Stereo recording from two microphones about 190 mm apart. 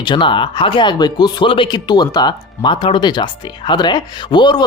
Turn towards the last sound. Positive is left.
turn(degrees=25)  # may be behind; listen again after turning